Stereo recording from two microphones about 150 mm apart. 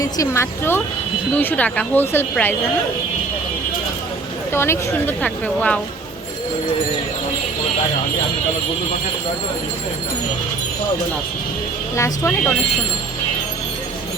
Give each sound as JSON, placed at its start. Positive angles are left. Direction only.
{"t": 0.0, "sound": "speech", "side_deg": 20}
{"t": 4.5, "sound": "speech", "side_deg": 15}
{"t": 11.9, "sound": "speech", "side_deg": 20}